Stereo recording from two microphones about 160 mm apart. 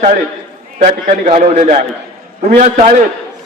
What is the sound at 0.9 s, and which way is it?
A man's voice, 55° right (ahead or behind).